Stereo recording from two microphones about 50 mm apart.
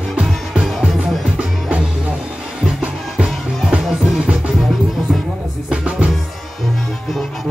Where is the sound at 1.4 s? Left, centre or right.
Right.